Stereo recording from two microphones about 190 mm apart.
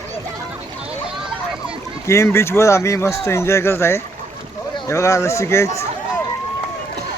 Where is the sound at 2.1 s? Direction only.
15° left (ahead or behind).